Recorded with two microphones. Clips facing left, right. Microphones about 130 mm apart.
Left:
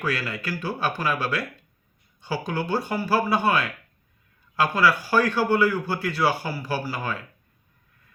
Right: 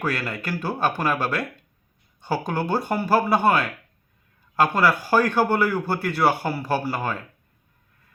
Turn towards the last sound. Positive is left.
turn(degrees=-50)  # may be behind; listen again after turning